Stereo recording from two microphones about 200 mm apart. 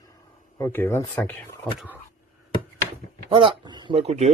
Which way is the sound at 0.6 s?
10° left (ahead or behind).